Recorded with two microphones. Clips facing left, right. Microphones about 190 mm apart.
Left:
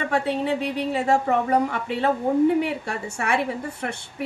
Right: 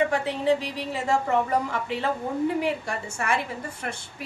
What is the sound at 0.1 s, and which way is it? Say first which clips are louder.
A woman's voice: even; 60° left (ahead or behind).